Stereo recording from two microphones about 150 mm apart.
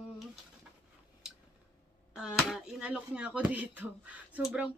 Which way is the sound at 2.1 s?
5° right (ahead or behind).